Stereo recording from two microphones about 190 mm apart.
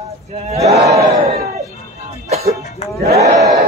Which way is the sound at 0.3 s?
35° right (ahead or behind).